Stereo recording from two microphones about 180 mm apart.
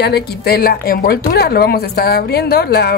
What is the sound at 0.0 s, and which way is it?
A woman's voice, 65° left (ahead or behind).